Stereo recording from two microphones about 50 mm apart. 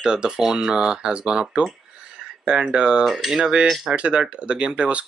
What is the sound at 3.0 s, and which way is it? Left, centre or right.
Cutlery, centre.